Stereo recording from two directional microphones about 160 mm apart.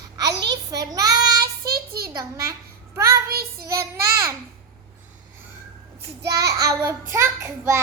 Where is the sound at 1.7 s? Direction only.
75° right (ahead or behind).